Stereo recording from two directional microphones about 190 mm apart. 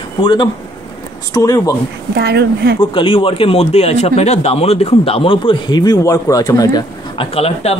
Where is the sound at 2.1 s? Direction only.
60° right (ahead or behind).